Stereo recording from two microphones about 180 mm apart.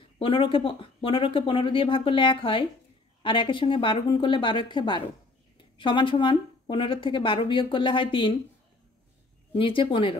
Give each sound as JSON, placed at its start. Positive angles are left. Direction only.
{"t": 0.2, "sound": "speech", "side_deg": 30}
{"t": 9.6, "sound": "speech", "side_deg": 30}